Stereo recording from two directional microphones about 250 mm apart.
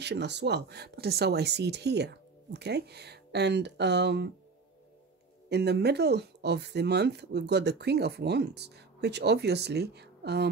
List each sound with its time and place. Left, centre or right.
0.0 s speech: right
5.5 s speech: right